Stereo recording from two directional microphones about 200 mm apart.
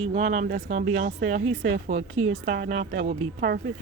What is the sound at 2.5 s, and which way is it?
Speech, 35° right (ahead or behind).